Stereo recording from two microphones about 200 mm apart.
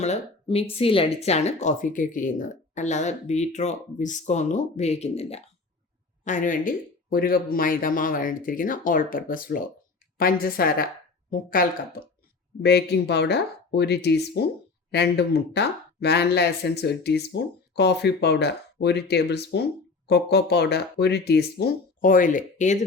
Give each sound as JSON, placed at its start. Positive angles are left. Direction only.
{"t": 0.0, "sound": "speech", "side_deg": 30}
{"t": 12.6, "sound": "speech", "side_deg": 55}